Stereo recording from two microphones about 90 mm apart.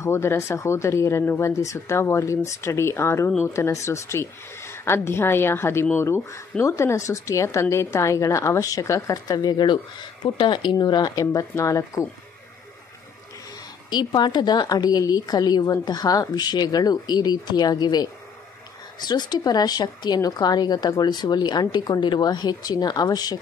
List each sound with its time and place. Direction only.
0.0 s speech: 30° left (ahead or behind); by 9.8 s 50° left (ahead or behind)
10.2 s a woman's voice: 60° left (ahead or behind)
11.3 s speech: 35° left (ahead or behind)
13.8 s a woman's voice: 55° left (ahead or behind)